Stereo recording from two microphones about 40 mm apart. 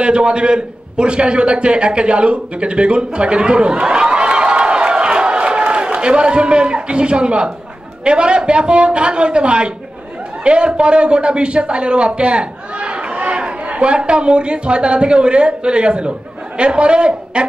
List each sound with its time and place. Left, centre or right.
0.0 s a man's voice: right